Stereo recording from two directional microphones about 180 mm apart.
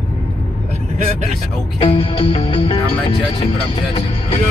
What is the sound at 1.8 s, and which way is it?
Speech, 30° left (ahead or behind).